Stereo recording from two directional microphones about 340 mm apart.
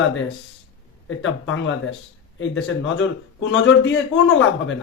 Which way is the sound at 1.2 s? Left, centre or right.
Left.